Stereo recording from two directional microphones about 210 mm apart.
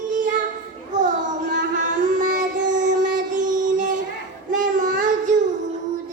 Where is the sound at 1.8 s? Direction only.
35° right (ahead or behind).